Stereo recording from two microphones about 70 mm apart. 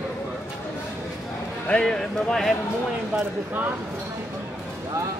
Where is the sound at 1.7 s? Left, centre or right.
Centre.